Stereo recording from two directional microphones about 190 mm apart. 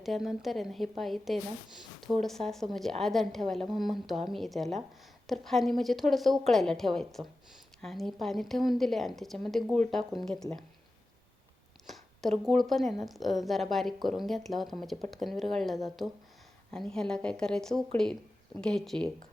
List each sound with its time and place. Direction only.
0.0 s a woman's voice: centre (ahead or behind)
12.5 s a woman's voice: centre (ahead or behind)